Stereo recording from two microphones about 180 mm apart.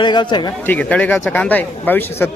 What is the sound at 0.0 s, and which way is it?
Speech, 25° left (ahead or behind).